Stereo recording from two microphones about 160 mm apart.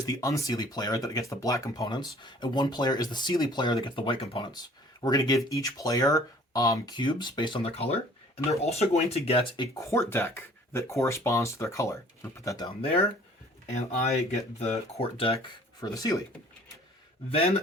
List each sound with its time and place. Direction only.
0.0 s speech: 20° left (ahead or behind)
9.7 s speech: 20° left (ahead or behind)
13.7 s speech: 45° left (ahead or behind)
15.8 s speech: 25° left (ahead or behind)
17.2 s speech: 35° left (ahead or behind)